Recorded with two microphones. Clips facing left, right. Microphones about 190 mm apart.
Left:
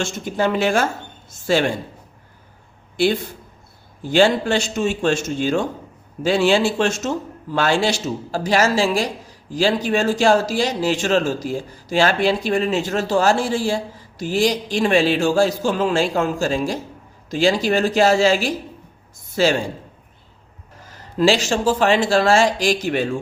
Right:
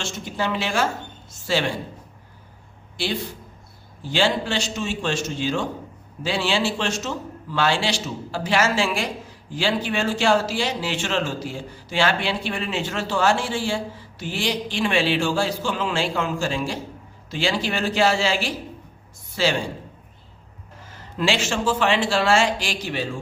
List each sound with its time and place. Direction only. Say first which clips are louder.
0.0 s a man's voice: left 6 dB; 50° left (ahead or behind)
4.0 s a man's voice: left 6 dB; 50° left (ahead or behind)
21.2 s speech: left 6 dB; 40° left (ahead or behind)